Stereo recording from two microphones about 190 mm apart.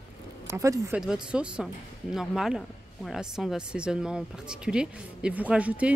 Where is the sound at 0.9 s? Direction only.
5° right (ahead or behind).